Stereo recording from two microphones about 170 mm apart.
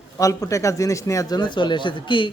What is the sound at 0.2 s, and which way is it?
A man's voice, 20° left (ahead or behind).